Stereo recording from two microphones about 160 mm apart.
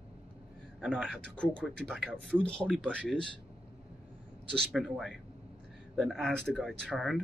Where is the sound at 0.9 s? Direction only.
5° right (ahead or behind).